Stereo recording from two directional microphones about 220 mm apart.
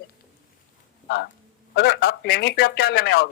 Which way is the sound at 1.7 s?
50° left (ahead or behind).